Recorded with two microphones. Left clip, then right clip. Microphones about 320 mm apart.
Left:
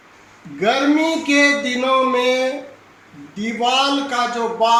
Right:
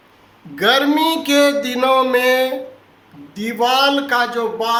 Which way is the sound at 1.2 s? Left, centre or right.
Right.